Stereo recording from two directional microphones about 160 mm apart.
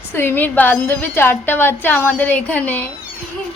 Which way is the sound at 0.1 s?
15° left (ahead or behind).